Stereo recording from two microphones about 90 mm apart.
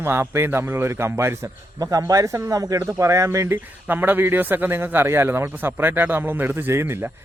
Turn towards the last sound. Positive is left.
turn(degrees=-25)  # may be behind; listen again after turning